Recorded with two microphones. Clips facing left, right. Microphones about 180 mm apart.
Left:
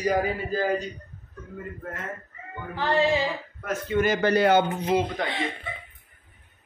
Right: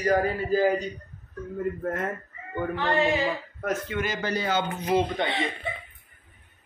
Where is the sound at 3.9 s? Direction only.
55° left (ahead or behind).